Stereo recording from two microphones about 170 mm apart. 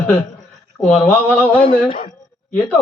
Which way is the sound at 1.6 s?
55° left (ahead or behind).